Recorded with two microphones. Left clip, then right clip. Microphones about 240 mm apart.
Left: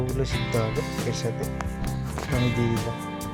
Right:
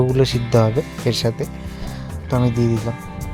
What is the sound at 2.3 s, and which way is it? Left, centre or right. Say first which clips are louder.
Speech: right 7 dB; centre.